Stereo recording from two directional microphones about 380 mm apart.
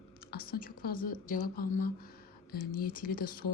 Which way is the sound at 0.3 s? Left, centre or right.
Left.